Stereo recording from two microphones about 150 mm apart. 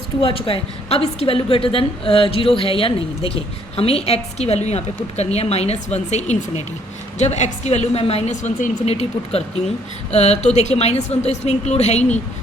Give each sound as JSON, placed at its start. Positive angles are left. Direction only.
{"t": 0.2, "sound": "a woman's voice", "side_deg": 40}